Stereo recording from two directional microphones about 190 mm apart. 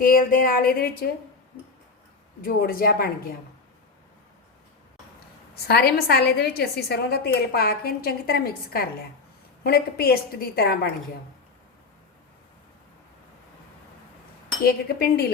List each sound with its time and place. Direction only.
0.0 s speech: 50° left (ahead or behind)
2.4 s speech: 50° left (ahead or behind)
5.6 s a woman's voice: 55° left (ahead or behind)
14.6 s speech: 55° left (ahead or behind)